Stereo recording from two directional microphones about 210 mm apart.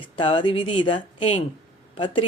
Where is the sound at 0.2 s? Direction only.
25° left (ahead or behind).